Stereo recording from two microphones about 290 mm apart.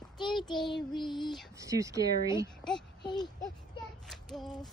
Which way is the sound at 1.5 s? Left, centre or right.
Centre.